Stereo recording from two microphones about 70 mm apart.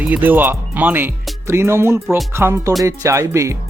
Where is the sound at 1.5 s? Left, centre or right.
Right.